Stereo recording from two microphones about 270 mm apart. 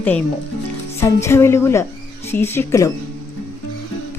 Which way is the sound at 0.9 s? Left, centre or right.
Centre.